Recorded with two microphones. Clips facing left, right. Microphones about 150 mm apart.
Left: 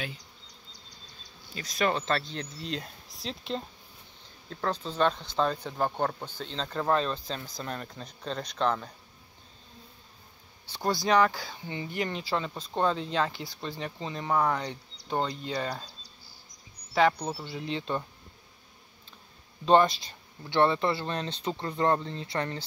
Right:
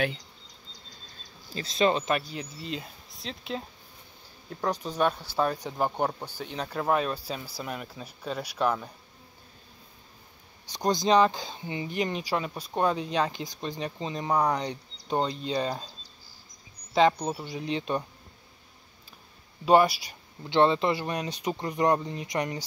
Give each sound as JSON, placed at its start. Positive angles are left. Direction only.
{"t": 1.5, "sound": "speech", "side_deg": -30}
{"t": 4.5, "sound": "speech", "side_deg": -15}
{"t": 10.7, "sound": "speech", "side_deg": -20}
{"t": 16.9, "sound": "speech", "side_deg": -20}
{"t": 19.6, "sound": "speech", "side_deg": -10}